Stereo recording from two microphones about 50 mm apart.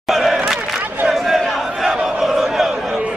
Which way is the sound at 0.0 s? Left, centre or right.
Centre.